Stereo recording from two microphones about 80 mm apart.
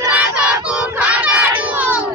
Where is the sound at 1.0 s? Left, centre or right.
Centre.